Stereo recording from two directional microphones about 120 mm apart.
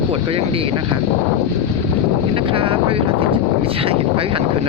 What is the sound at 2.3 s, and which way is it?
Speech, 45° right (ahead or behind).